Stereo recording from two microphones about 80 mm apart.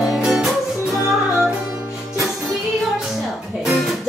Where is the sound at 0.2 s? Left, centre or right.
Centre.